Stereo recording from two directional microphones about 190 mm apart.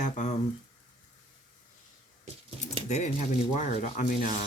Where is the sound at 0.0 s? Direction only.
40° left (ahead or behind).